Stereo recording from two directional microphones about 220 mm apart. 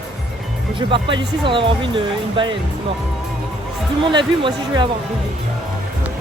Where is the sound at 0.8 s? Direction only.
20° right (ahead or behind).